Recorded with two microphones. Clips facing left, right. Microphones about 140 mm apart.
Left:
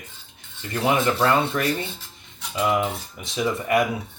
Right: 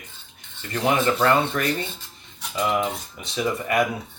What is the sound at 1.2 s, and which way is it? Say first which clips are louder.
Speech: even; 20° left (ahead or behind).